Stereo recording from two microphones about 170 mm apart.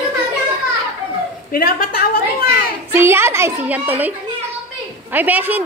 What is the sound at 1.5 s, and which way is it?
Speech, 60° left (ahead or behind).